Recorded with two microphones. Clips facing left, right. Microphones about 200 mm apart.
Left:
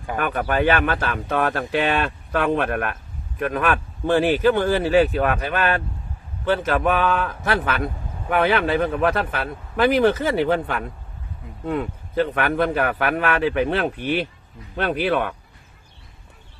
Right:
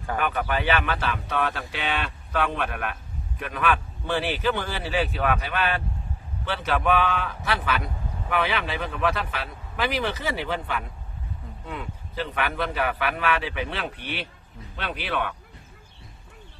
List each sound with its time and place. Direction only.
0.2 s speech: 50° left (ahead or behind)